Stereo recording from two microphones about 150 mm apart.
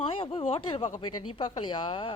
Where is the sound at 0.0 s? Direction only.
35° left (ahead or behind).